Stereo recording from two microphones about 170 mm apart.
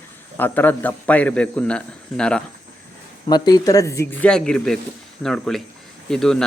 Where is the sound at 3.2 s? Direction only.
25° left (ahead or behind); by 6.4 s 5° left (ahead or behind).